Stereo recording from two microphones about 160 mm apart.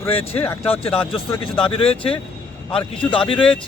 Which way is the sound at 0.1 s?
40° left (ahead or behind).